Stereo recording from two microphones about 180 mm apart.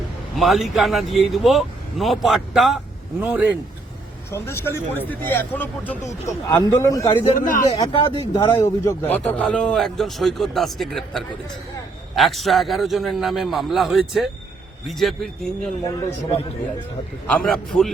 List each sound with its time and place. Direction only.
0.3 s speech: centre (ahead or behind)
4.3 s a man's voice: 15° left (ahead or behind)
7.3 s speech: 45° left (ahead or behind)
7.8 s a man's voice: 30° left (ahead or behind)
8.3 s speech: 15° left (ahead or behind)
17.2 s speech: 5° left (ahead or behind)